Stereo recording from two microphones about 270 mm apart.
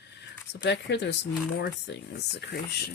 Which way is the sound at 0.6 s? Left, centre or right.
Left.